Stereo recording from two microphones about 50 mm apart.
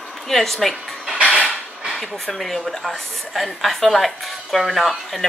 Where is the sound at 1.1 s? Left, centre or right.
Right.